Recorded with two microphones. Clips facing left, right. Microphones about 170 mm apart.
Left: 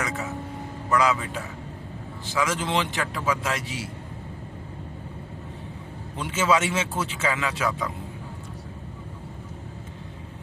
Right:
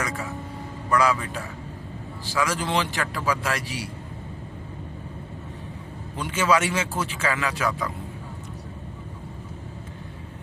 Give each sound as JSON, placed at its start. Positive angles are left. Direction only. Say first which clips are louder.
{"t": 0.0, "sound": "speech", "louder": "even", "side_deg": 20}
{"t": 6.1, "sound": "speech", "louder": "right 1 dB", "side_deg": 25}